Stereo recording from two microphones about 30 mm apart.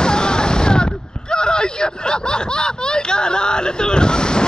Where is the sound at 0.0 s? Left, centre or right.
Left.